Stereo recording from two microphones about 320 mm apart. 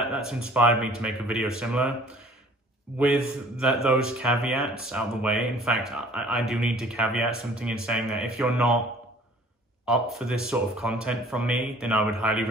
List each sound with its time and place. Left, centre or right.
0.0 s speech: centre
3.1 s speech: centre
9.8 s speech: centre